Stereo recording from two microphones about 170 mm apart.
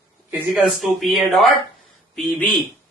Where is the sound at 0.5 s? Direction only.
Centre (ahead or behind).